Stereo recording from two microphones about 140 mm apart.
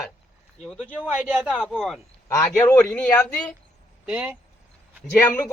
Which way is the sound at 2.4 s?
20° left (ahead or behind).